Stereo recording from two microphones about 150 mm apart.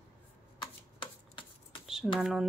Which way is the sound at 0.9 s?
35° left (ahead or behind).